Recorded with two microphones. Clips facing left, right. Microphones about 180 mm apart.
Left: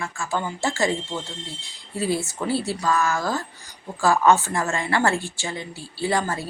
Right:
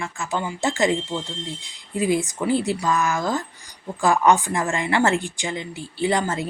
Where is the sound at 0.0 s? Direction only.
20° right (ahead or behind).